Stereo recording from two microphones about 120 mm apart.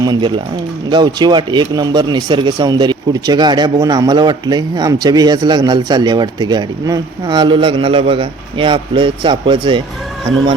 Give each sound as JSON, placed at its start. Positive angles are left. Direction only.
{"t": 0.0, "sound": "speech", "side_deg": -40}